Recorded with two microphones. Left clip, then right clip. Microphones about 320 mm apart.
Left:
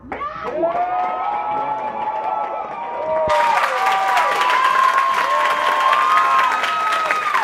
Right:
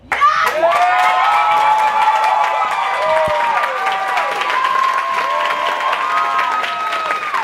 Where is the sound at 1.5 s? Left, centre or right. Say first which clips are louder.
Right 10 dB; right.